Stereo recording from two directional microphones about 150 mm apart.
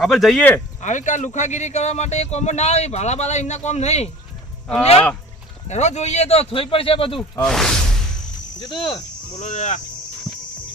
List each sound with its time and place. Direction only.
0.0 s speech: centre (ahead or behind)
0.8 s speech: 55° left (ahead or behind)
5.6 s speech: 50° left (ahead or behind)
7.3 s speech: 5° left (ahead or behind)
8.5 s speech: 30° left (ahead or behind)
9.4 s speech: 50° left (ahead or behind)